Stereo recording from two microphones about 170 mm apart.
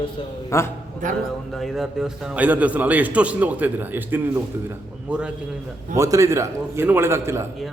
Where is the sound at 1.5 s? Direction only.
Centre (ahead or behind).